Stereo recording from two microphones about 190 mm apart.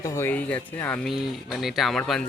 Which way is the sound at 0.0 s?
15° left (ahead or behind).